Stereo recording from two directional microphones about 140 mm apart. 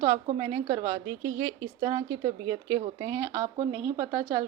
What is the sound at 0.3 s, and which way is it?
A woman's voice, 25° right (ahead or behind).